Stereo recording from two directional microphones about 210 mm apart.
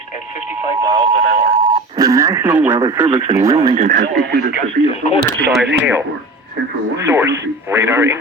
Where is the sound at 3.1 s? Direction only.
30° right (ahead or behind).